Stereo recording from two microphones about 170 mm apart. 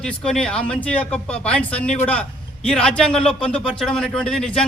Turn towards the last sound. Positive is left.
turn(degrees=5)  # may be behind; listen again after turning